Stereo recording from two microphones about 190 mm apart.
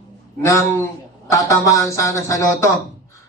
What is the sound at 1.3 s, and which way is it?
Speech, 15° left (ahead or behind).